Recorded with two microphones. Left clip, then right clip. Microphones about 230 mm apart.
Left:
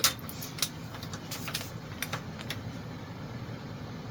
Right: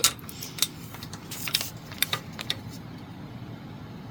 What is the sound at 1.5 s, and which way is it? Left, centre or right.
Typing, right.